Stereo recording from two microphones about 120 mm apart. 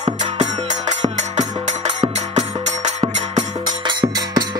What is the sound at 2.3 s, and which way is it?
Music, 70° right (ahead or behind).